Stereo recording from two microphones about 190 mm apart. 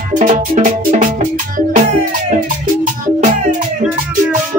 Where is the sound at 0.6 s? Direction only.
45° right (ahead or behind).